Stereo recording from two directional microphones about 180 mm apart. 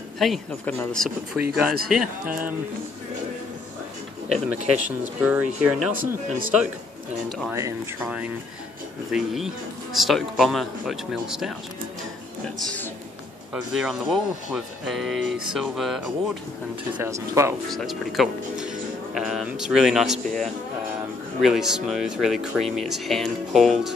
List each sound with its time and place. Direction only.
0.2 s speech: centre (ahead or behind)
4.7 s speech: 10° right (ahead or behind)
7.5 s speech: 15° right (ahead or behind)
9.1 s speech: centre (ahead or behind)
12.5 s a man's voice: 10° left (ahead or behind)
13.5 s speech: 5° right (ahead or behind)
17.0 s speech: 15° right (ahead or behind)
17.6 s speech: centre (ahead or behind)